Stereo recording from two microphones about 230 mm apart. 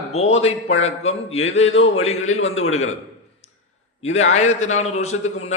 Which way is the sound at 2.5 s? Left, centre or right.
Left.